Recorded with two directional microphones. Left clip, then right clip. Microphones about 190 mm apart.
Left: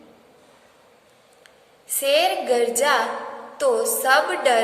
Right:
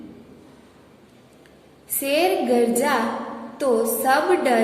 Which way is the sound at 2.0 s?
15° left (ahead or behind).